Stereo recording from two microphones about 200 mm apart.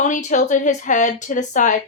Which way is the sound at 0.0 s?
40° left (ahead or behind).